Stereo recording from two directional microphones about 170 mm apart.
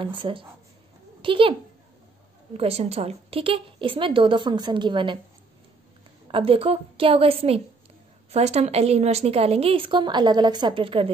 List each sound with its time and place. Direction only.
0.0 s a woman's voice: 30° right (ahead or behind)
2.5 s a woman's voice: 35° right (ahead or behind)
6.2 s a woman's voice: 30° right (ahead or behind)